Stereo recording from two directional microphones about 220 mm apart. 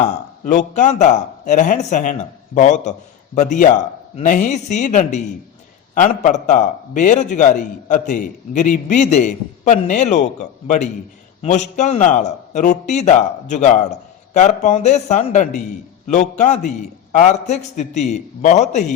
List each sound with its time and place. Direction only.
0.0 s a man's voice: 35° left (ahead or behind)
11.4 s a man's voice: 30° left (ahead or behind)